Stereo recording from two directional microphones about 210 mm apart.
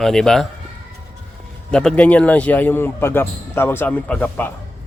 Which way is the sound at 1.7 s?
5° left (ahead or behind).